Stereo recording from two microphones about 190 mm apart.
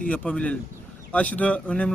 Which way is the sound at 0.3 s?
10° left (ahead or behind).